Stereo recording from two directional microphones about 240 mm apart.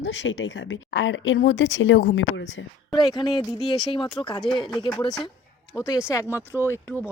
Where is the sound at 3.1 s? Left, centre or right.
Centre.